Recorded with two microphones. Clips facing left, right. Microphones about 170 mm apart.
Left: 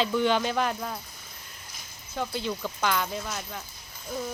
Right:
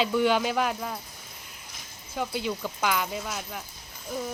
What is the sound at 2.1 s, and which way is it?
Speech, 10° right (ahead or behind).